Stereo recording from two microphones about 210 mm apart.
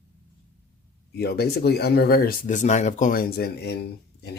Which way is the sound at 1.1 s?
50° left (ahead or behind).